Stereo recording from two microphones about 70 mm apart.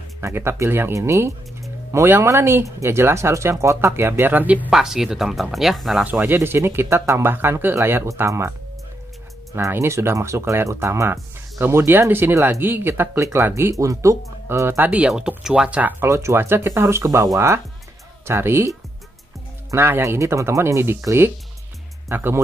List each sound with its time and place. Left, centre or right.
0.2 s speech: right
4.6 s speech: centre
6.2 s speech: right
9.7 s speech: right
14.8 s speech: right
15.0 s speech: centre
16.0 s speech: right
17.0 s speech: right
19.7 s speech: right